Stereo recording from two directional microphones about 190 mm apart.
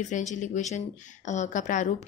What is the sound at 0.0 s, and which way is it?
A woman's voice, 40° left (ahead or behind).